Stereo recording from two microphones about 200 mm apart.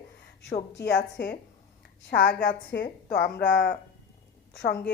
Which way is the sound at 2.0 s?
45° left (ahead or behind).